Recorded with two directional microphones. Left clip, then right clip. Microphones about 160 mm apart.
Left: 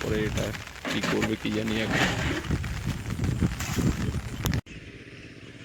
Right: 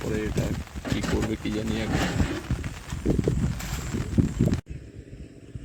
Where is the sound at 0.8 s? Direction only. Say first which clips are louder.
Left 2 dB; 45° right (ahead or behind).